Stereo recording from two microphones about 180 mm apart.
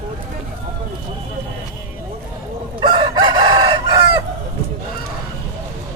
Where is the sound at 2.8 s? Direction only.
25° right (ahead or behind).